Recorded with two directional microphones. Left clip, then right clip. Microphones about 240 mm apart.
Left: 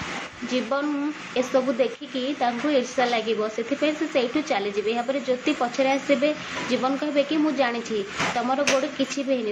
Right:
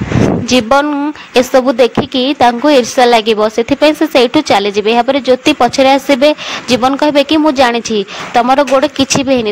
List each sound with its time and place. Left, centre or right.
0.5 s a woman's voice: right